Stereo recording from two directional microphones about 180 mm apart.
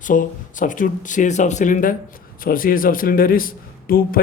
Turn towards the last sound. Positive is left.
turn(degrees=55)  # may be behind; listen again after turning